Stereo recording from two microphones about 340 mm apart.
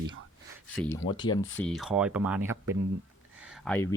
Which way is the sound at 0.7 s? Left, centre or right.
Centre.